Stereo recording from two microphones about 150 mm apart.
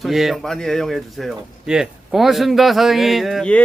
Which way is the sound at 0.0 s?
Centre (ahead or behind).